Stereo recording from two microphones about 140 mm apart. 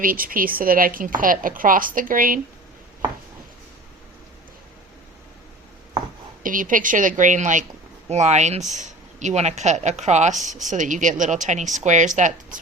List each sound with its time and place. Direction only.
0.0 s speech: 90° right
6.4 s a woman's voice: 70° right (ahead or behind)